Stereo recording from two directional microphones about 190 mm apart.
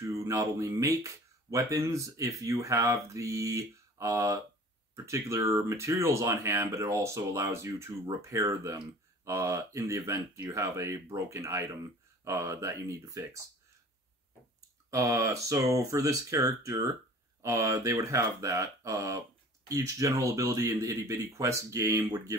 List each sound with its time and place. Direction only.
0.0 s speech: 15° right (ahead or behind)
14.9 s speech: 15° right (ahead or behind)